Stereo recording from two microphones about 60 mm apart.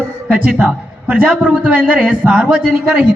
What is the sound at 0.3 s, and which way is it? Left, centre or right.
A man's voice, right.